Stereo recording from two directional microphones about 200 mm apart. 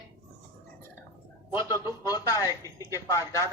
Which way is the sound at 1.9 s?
20° left (ahead or behind).